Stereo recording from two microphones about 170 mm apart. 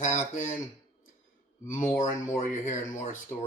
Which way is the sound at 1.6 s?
50° left (ahead or behind).